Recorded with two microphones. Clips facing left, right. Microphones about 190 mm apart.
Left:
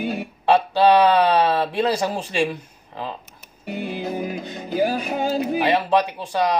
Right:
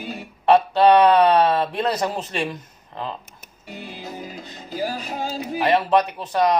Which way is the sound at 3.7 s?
60° left (ahead or behind).